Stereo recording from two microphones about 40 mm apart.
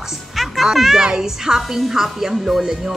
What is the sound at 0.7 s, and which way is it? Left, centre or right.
Speech, centre.